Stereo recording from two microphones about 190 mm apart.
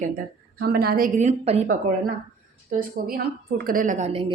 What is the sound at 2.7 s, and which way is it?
A woman's voice, 50° right (ahead or behind).